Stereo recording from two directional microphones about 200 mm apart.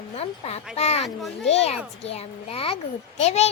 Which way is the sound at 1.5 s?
30° left (ahead or behind).